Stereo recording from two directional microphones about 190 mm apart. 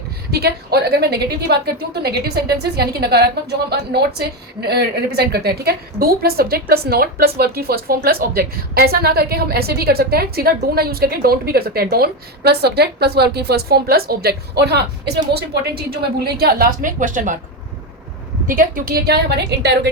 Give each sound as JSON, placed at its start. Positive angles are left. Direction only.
{"t": 0.3, "sound": "a woman's voice", "side_deg": -55}
{"t": 18.4, "sound": "a woman's voice", "side_deg": -45}